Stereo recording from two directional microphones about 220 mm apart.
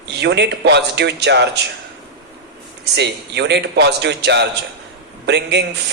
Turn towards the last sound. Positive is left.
turn(degrees=-50)  # may be behind; listen again after turning